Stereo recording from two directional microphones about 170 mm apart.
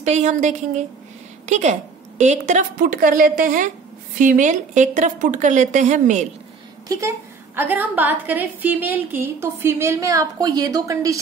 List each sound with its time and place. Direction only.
0.0 s a woman's voice: 45° right (ahead or behind)
6.9 s a woman's voice: 15° right (ahead or behind)